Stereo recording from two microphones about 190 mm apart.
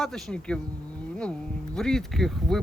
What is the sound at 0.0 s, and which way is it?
Speech, centre (ahead or behind).